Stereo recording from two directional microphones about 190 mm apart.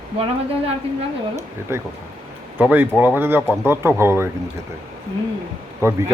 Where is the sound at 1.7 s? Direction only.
10° right (ahead or behind).